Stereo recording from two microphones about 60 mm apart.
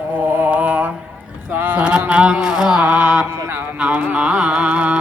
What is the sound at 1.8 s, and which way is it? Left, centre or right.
Mantra, centre.